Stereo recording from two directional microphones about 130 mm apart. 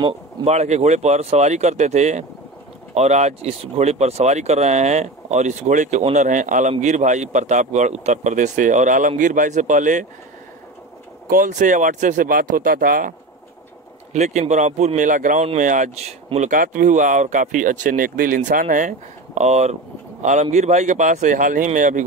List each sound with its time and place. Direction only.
0.5 s speech: 60° right (ahead or behind); by 6.7 s 75° right (ahead or behind)
6.7 s speech: 65° right (ahead or behind)
11.2 s speech: 90° right
14.1 s speech: 60° right (ahead or behind); by 15.4 s 85° right
15.4 s speech: 70° right (ahead or behind)